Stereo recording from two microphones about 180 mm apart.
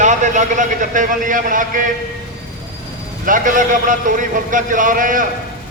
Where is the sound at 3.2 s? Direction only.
45° right (ahead or behind).